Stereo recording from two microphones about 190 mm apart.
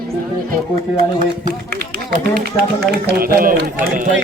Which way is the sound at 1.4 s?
50° right (ahead or behind).